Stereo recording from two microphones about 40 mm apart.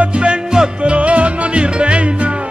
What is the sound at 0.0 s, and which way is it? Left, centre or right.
Music, right.